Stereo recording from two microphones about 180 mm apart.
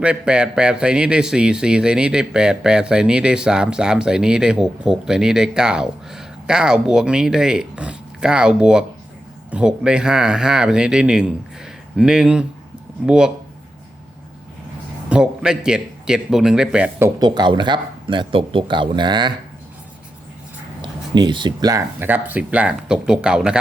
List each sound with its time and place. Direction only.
0.0 s a man's voice: 5° right (ahead or behind)
15.1 s a man's voice: 5° right (ahead or behind)
17.2 s speech: 25° right (ahead or behind)
20.8 s speech: 25° right (ahead or behind); by 23.6 s 5° right (ahead or behind)